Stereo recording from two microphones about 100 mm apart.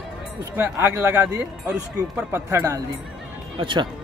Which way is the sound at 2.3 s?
25° right (ahead or behind).